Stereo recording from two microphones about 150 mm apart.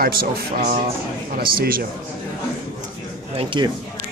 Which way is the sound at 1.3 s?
75° right (ahead or behind).